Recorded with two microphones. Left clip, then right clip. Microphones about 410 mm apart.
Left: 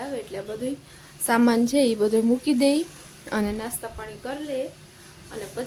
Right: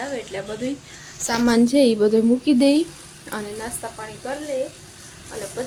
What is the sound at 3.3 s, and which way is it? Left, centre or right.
Speech, left.